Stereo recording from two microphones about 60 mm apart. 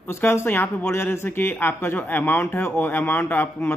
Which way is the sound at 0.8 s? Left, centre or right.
Left.